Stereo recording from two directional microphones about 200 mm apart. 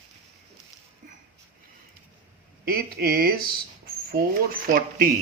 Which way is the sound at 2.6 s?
50° right (ahead or behind).